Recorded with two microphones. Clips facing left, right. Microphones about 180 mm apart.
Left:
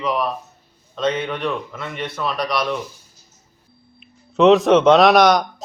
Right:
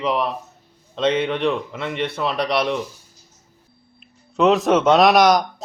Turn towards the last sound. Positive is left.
turn(degrees=0)  # may be behind; listen again after turning